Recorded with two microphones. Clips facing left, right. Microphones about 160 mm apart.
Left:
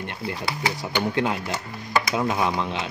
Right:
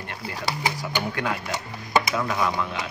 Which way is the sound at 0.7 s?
25° left (ahead or behind).